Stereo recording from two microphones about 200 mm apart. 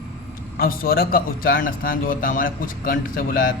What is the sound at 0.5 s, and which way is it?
A man's voice, 45° left (ahead or behind).